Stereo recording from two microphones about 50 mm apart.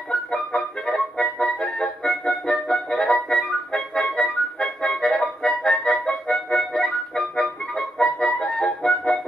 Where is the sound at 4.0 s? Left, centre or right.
Centre.